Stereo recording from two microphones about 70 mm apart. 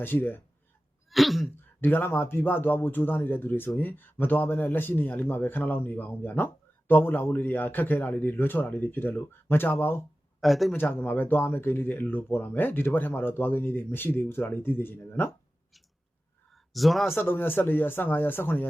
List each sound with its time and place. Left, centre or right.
0.0 s a man's voice: left
1.1 s throat clearing: centre
1.8 s a man's voice: left
10.4 s throat clearing: centre
10.8 s a man's voice: left
16.5 s a sound: centre
17.2 s speech: left